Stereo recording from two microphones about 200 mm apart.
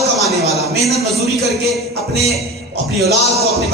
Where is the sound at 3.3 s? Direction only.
15° right (ahead or behind).